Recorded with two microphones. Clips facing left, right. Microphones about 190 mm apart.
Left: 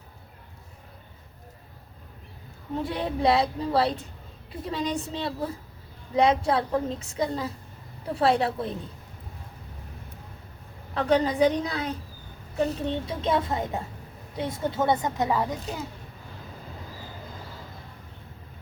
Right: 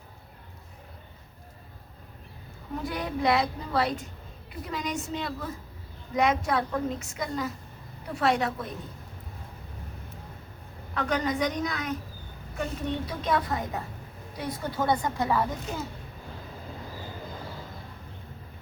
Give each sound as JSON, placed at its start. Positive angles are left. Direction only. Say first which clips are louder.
{"t": 2.7, "sound": "a woman's voice", "louder": "left 3 dB", "side_deg": 30}
{"t": 10.9, "sound": "a woman's voice", "louder": "left 5 dB", "side_deg": 30}